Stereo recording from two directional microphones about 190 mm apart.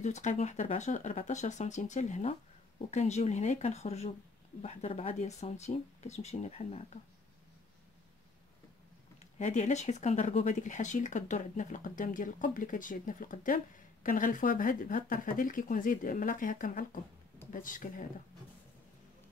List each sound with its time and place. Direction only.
0.0 s speech: 40° left (ahead or behind)
9.2 s speech: 40° left (ahead or behind)